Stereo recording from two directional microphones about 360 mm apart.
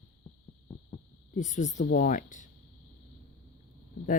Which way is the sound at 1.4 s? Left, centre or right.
Centre.